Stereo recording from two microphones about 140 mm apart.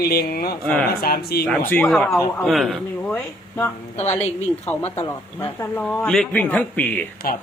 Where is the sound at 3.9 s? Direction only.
50° left (ahead or behind).